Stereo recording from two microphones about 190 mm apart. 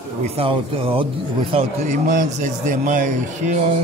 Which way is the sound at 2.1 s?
40° right (ahead or behind).